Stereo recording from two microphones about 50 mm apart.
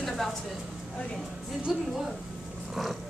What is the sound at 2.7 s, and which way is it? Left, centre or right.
Speech, centre.